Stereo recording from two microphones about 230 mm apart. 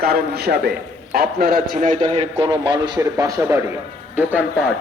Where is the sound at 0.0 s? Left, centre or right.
Right; by 4.4 s centre.